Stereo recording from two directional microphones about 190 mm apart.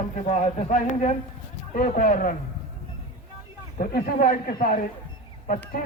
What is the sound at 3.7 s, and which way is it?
A man's voice, 45° left (ahead or behind).